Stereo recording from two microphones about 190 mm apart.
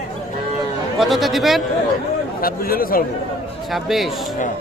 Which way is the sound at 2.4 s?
50° left (ahead or behind).